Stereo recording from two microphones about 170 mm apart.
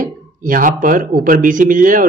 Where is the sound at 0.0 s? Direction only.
55° right (ahead or behind).